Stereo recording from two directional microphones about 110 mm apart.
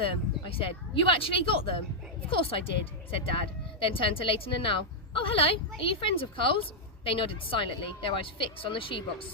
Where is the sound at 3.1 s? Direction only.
55° left (ahead or behind).